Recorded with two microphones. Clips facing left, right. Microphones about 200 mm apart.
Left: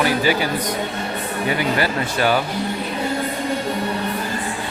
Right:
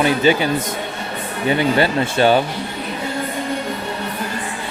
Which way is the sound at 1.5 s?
25° right (ahead or behind).